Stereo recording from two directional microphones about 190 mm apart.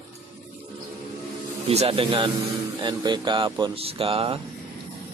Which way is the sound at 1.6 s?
30° right (ahead or behind).